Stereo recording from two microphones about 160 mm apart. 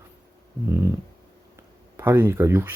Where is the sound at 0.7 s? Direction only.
15° right (ahead or behind).